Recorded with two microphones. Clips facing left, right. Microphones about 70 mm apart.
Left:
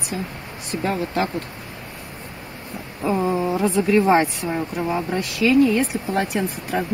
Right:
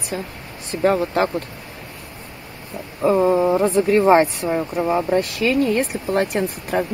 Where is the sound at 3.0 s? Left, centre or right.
Right.